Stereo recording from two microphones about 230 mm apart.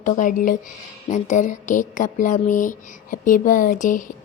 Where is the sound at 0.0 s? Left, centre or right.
Left.